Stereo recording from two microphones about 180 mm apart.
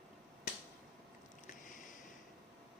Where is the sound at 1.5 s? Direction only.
45° left (ahead or behind).